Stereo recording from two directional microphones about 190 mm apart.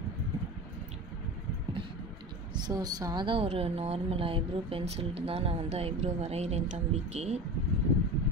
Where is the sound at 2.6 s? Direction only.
20° right (ahead or behind); by 7.4 s 35° right (ahead or behind).